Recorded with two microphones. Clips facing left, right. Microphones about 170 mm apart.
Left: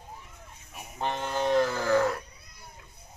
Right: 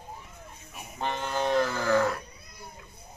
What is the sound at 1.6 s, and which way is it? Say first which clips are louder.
Wild animals: even; 25° left (ahead or behind).